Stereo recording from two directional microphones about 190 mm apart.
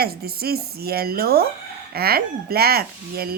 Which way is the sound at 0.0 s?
55° right (ahead or behind).